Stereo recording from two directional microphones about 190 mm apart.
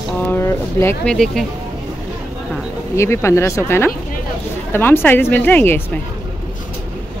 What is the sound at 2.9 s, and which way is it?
Speech, 15° left (ahead or behind).